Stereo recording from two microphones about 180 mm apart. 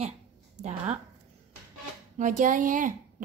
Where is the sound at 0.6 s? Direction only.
40° right (ahead or behind).